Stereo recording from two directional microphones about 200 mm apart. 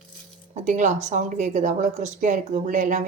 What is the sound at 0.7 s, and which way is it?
A woman's voice, 40° right (ahead or behind).